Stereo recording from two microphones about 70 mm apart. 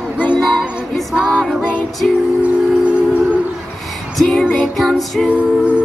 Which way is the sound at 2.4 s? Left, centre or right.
Centre.